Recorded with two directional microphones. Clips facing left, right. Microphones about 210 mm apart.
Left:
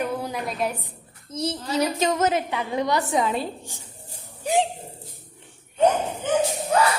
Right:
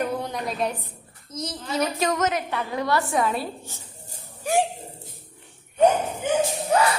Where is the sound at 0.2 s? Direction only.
5° left (ahead or behind).